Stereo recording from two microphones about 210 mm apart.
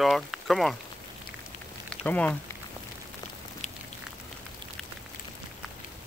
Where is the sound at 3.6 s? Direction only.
30° left (ahead or behind).